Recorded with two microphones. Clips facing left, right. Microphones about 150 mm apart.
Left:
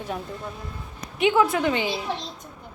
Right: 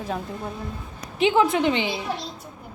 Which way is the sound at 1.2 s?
25° right (ahead or behind).